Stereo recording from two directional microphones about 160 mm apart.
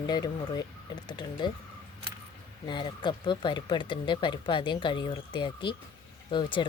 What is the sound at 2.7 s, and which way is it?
Speech, 30° left (ahead or behind).